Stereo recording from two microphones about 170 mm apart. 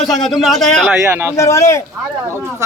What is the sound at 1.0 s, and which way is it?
Speech, 15° right (ahead or behind).